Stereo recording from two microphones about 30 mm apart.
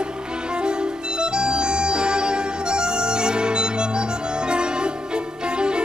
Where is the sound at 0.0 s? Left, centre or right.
Right.